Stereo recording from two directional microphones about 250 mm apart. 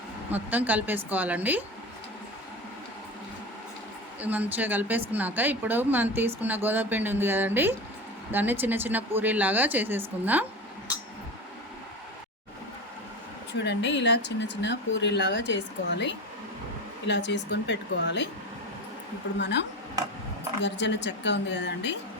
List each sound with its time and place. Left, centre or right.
0.3 s a woman's voice: centre
4.2 s a woman's voice: centre
13.5 s speech: left
19.4 s speech: left